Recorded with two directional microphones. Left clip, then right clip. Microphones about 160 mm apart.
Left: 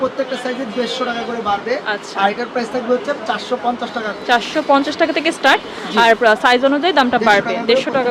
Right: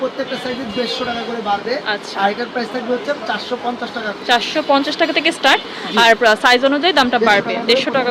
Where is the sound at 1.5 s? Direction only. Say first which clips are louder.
Even; 10° left (ahead or behind).